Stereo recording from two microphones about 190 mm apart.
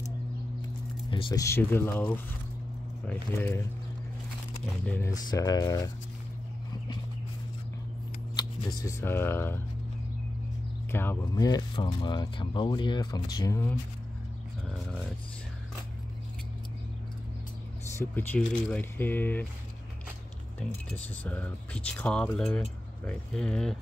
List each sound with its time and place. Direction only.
1.1 s speech: 25° left (ahead or behind)
1.4 s speech: 15° left (ahead or behind)
4.8 s speech: 10° left (ahead or behind)
8.4 s speech: 20° left (ahead or behind)
10.9 s speech: 10° left (ahead or behind)
17.9 s speech: 10° left (ahead or behind)
20.9 s speech: 10° left (ahead or behind)